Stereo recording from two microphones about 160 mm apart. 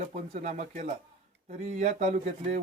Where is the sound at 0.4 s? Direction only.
45° right (ahead or behind).